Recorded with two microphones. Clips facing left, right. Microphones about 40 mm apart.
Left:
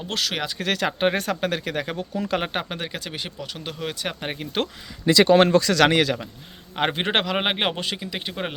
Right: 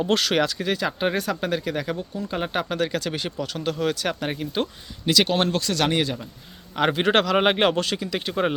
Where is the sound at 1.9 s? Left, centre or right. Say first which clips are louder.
Left 4 dB; left.